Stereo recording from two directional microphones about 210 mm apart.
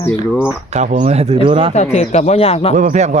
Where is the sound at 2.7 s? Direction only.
35° right (ahead or behind).